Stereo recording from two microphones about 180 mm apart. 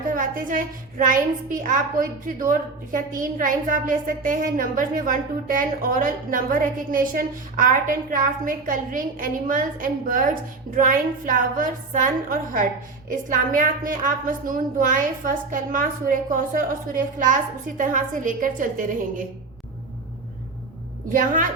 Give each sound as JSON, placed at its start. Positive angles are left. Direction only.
{"t": 0.1, "sound": "a woman's voice", "side_deg": -50}
{"t": 21.1, "sound": "a woman's voice", "side_deg": -50}